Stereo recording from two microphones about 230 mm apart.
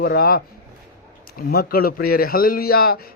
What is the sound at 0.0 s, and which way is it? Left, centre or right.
A man's voice, left.